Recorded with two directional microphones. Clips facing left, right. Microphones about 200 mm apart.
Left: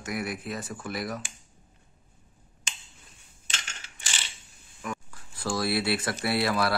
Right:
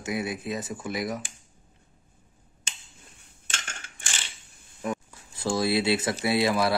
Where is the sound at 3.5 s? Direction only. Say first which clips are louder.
Right 2 dB; 50° right (ahead or behind).